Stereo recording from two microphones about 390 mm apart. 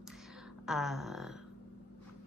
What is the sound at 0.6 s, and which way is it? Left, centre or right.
Speech, centre.